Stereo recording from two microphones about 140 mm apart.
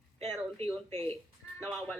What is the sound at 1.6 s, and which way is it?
Speech, 5° left (ahead or behind).